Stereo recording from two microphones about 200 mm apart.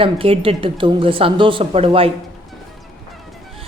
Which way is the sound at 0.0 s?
25° right (ahead or behind).